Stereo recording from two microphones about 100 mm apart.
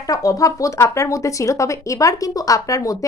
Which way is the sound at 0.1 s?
35° left (ahead or behind).